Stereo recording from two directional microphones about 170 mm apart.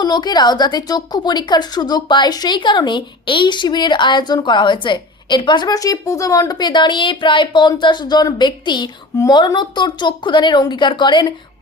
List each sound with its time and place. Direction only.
0.0 s a woman's voice: 25° left (ahead or behind)